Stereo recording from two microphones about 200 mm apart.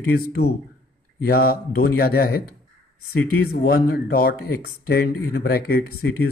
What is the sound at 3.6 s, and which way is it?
Speech, 45° left (ahead or behind).